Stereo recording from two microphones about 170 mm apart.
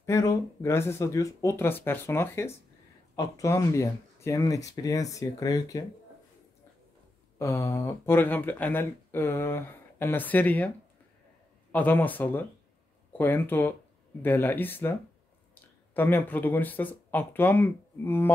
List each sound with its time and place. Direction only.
0.0 s speech: 20° left (ahead or behind)
7.3 s speech: 15° left (ahead or behind)
11.7 s speech: 10° left (ahead or behind)